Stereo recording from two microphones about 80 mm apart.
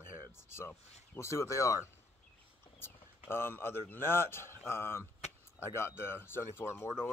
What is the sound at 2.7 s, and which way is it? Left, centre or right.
Speech, left.